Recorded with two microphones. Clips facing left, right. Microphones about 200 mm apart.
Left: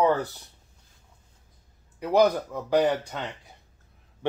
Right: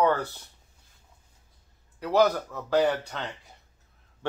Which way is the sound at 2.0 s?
15° left (ahead or behind).